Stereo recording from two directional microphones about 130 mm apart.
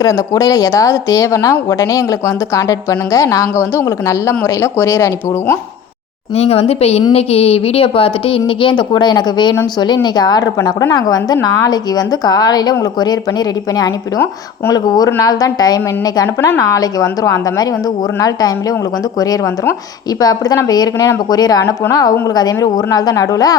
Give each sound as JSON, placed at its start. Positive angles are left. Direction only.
{"t": 0.0, "sound": "speech", "side_deg": 25}
{"t": 6.3, "sound": "a woman's voice", "side_deg": 50}
{"t": 14.7, "sound": "speech", "side_deg": 30}
{"t": 20.1, "sound": "speech", "side_deg": 30}